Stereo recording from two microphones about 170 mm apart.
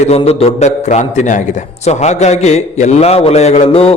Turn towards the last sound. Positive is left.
turn(degrees=35)  # may be behind; listen again after turning